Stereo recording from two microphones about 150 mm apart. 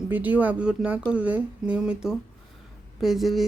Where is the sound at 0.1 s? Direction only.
10° right (ahead or behind).